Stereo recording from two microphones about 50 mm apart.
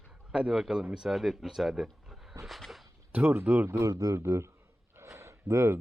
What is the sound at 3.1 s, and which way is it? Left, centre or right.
Speech, right.